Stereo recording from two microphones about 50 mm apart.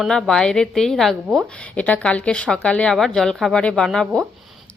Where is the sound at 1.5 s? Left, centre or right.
Left.